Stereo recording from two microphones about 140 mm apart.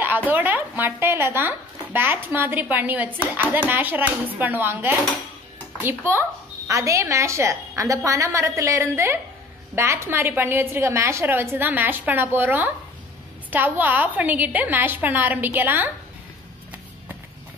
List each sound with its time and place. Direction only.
0.0 s a woman's voice: 15° right (ahead or behind)